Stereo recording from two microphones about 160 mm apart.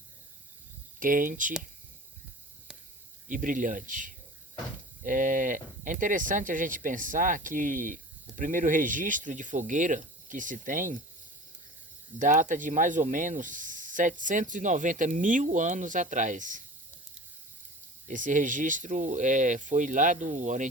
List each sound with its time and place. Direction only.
0.9 s speech: 60° right (ahead or behind)
3.2 s speech: 55° right (ahead or behind)
12.2 s speech: 50° right (ahead or behind)
18.1 s speech: 55° right (ahead or behind)